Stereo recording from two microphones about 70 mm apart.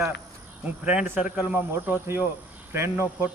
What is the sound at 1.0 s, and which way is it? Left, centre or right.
Speech, right.